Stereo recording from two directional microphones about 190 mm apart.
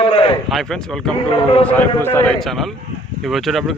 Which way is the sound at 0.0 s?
30° left (ahead or behind).